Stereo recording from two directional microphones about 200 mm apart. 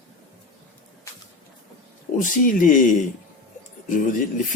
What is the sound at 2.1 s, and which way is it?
Speech, 40° left (ahead or behind).